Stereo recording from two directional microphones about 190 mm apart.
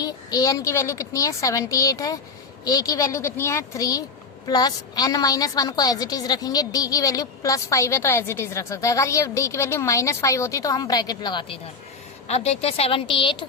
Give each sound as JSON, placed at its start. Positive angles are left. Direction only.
{"t": 0.0, "sound": "a woman's voice", "side_deg": 20}
{"t": 12.3, "sound": "a woman's voice", "side_deg": 35}